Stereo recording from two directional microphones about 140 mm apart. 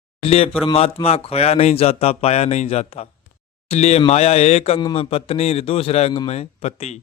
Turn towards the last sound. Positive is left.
turn(degrees=50)  # may be behind; listen again after turning